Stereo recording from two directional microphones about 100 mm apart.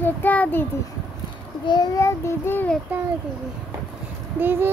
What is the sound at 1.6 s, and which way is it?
Speech, 45° left (ahead or behind).